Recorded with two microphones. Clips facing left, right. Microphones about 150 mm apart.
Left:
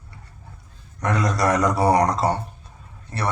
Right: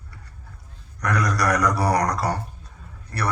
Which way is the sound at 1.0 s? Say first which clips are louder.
Left 2 dB; 25° left (ahead or behind).